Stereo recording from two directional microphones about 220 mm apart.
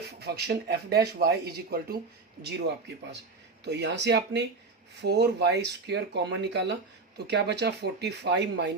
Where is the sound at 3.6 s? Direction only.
50° right (ahead or behind).